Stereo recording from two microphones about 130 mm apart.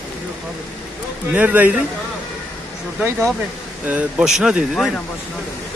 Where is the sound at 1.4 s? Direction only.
10° right (ahead or behind).